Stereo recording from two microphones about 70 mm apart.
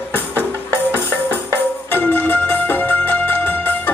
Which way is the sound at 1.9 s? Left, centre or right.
Left.